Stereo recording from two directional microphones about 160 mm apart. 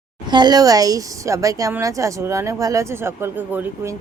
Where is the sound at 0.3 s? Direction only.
25° right (ahead or behind).